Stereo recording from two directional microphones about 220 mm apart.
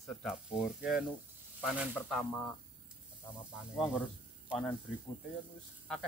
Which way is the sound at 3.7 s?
Centre (ahead or behind).